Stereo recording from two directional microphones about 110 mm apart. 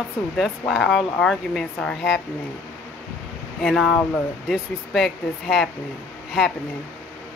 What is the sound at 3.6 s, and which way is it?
Speech, 5° left (ahead or behind).